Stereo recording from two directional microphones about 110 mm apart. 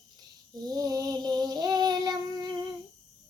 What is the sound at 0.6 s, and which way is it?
Child singing, 35° right (ahead or behind).